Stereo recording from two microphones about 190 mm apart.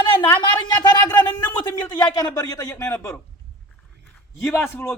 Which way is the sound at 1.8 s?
20° left (ahead or behind).